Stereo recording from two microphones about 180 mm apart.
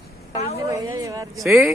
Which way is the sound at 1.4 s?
Centre (ahead or behind).